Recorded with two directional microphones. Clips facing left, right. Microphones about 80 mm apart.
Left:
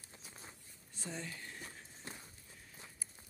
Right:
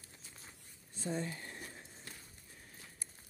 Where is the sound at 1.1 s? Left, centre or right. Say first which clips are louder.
Right 6 dB; right.